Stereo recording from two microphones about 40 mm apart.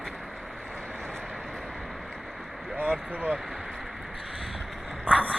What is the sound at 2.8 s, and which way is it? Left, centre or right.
Speech, right.